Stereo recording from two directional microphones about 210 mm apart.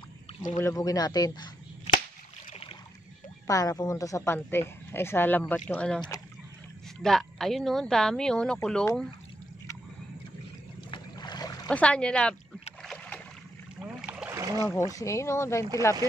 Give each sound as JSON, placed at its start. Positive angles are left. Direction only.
{"t": 0.4, "sound": "a woman's voice", "side_deg": 15}
{"t": 3.4, "sound": "a woman's voice", "side_deg": 15}
{"t": 10.9, "sound": "boat", "side_deg": 20}
{"t": 11.7, "sound": "speech", "side_deg": 5}
{"t": 12.8, "sound": "rowboat", "side_deg": 5}
{"t": 13.7, "sound": "boat", "side_deg": -5}
{"t": 14.9, "sound": "a woman's voice", "side_deg": 15}